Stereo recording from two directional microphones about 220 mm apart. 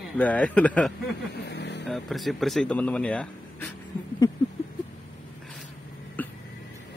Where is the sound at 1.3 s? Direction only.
50° left (ahead or behind).